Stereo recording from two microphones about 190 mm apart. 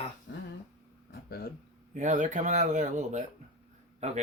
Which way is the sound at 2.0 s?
40° right (ahead or behind).